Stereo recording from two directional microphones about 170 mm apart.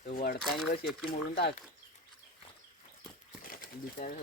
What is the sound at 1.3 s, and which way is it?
Speech, 80° left.